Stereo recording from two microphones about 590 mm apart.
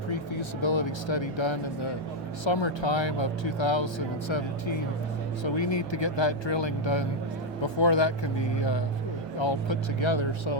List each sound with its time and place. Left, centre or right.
0.1 s speech: left